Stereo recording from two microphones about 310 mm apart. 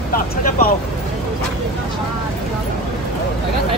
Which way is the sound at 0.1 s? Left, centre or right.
Left.